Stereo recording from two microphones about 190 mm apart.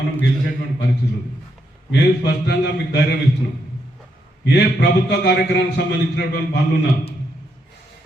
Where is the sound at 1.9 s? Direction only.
65° left (ahead or behind).